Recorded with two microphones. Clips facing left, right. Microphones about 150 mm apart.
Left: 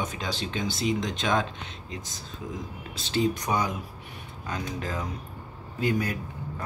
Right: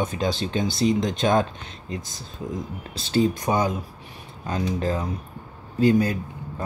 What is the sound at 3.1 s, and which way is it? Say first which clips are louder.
Speech: right 5 dB; 25° right (ahead or behind).